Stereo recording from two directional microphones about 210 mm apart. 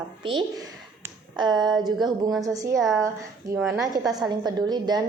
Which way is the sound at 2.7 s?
Centre (ahead or behind).